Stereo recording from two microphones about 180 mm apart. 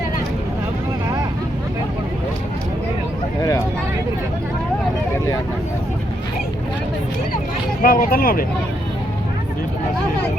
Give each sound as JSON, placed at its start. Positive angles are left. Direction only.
{"t": 7.8, "sound": "speech", "side_deg": 50}